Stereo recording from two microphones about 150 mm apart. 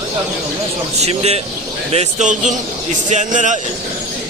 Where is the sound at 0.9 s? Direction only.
45° right (ahead or behind).